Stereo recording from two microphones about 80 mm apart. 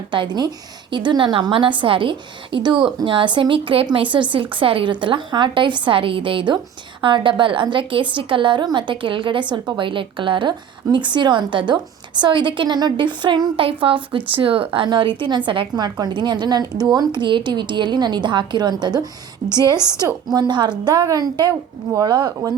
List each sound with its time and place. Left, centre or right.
0.1 s a woman's voice: right
10.9 s a woman's voice: right
15.7 s a woman's voice: right